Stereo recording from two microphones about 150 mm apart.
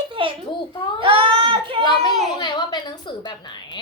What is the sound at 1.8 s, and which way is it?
A woman's voice, 30° left (ahead or behind).